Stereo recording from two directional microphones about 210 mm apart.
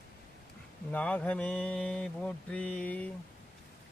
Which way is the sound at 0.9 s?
5° left (ahead or behind).